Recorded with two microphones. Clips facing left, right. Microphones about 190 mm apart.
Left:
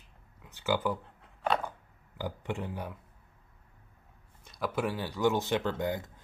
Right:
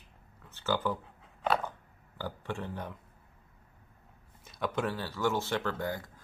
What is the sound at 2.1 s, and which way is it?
Speech, 15° left (ahead or behind).